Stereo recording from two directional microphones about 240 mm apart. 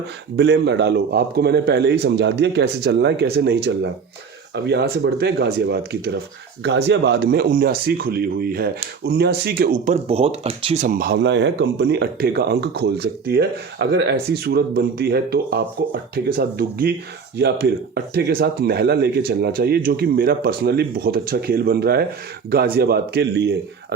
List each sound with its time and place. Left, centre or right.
0.3 s speech: right
10.8 s speech: right